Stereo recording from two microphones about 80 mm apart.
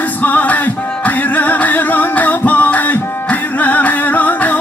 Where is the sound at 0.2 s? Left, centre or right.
Centre.